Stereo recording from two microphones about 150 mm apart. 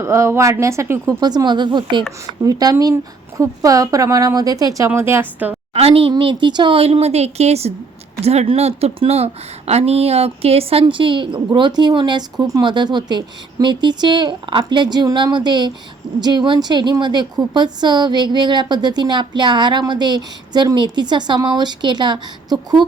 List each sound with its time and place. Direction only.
0.0 s a woman's voice: 20° right (ahead or behind)
5.7 s a woman's voice: 40° right (ahead or behind)